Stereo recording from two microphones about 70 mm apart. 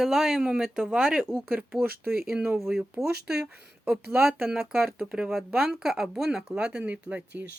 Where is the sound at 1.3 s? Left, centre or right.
Right.